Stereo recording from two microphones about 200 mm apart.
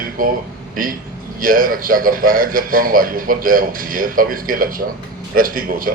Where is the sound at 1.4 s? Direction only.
45° right (ahead or behind).